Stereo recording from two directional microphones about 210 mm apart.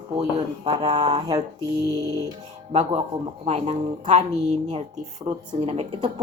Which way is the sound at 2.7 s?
30° right (ahead or behind).